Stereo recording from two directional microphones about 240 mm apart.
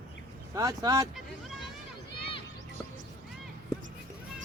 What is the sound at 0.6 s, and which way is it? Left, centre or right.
Speech, centre.